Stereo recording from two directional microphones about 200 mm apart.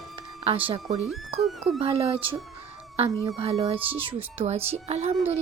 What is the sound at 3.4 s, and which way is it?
A woman's voice, 30° right (ahead or behind).